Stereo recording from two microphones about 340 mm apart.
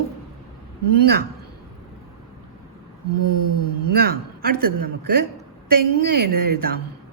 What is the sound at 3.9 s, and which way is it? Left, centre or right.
Speech, right.